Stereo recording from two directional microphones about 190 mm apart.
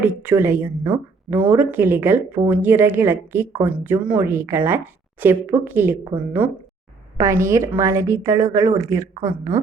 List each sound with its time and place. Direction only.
0.0 s speech: 10° right (ahead or behind)
7.2 s speech: 15° right (ahead or behind)